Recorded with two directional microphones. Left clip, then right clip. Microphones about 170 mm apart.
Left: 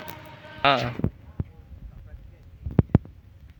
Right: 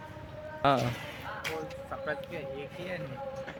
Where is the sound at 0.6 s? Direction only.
5° right (ahead or behind).